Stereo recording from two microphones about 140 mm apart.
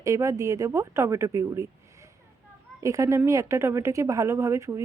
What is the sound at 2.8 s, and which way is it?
Speech, 20° right (ahead or behind).